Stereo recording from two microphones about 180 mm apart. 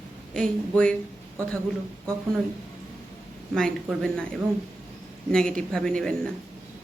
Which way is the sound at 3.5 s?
5° left (ahead or behind).